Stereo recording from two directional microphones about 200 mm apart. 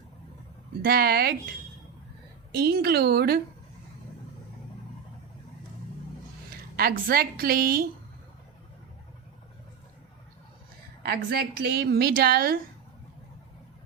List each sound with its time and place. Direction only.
0.8 s a woman's voice: 50° right (ahead or behind)
2.5 s a woman's voice: 50° right (ahead or behind)
6.7 s a woman's voice: 50° right (ahead or behind)
11.0 s a woman's voice: 50° right (ahead or behind)